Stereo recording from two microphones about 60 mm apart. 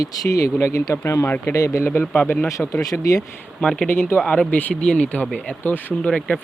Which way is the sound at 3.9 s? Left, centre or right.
Left.